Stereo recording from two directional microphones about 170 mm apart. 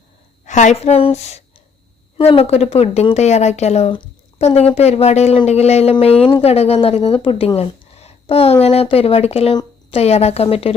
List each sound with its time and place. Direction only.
0.4 s a woman's voice: 45° left (ahead or behind)